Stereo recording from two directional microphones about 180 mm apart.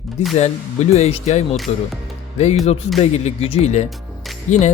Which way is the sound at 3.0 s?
35° left (ahead or behind).